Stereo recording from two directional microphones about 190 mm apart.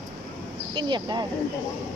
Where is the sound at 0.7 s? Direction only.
25° right (ahead or behind).